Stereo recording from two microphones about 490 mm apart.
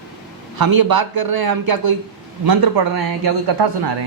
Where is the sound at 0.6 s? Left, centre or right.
Right.